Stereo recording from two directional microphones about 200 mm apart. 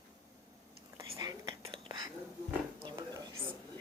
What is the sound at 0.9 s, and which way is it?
Whispering, 15° right (ahead or behind).